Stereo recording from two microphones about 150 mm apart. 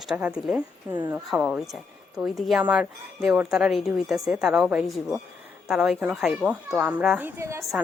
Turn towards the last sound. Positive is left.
turn(degrees=-20)  # may be behind; listen again after turning